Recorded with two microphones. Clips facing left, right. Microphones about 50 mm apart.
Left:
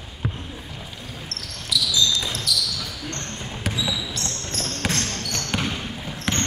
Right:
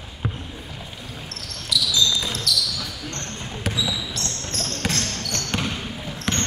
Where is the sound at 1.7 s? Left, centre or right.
Centre.